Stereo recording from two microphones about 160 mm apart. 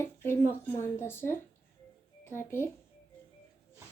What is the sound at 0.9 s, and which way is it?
A woman's voice, 15° left (ahead or behind).